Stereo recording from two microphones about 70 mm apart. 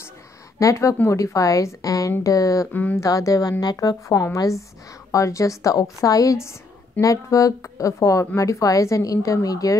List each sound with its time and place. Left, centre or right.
0.6 s a woman's voice: left
2.7 s speech: left
3.0 s speech: left
4.4 s a woman's voice: left